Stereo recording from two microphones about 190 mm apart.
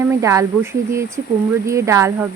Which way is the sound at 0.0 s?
15° right (ahead or behind).